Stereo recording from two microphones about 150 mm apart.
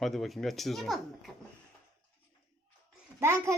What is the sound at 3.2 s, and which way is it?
Speech, 15° right (ahead or behind).